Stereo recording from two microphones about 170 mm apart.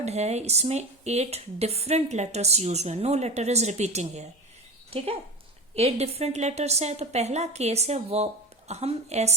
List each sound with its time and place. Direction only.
0.0 s speech: 40° right (ahead or behind)